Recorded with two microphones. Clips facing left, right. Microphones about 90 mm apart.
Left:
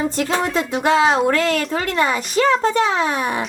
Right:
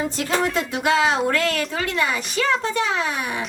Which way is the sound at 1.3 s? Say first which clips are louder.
Left 4 dB; 35° left (ahead or behind).